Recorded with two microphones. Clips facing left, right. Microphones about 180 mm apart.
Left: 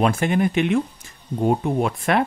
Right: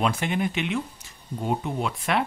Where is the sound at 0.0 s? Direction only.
50° left (ahead or behind).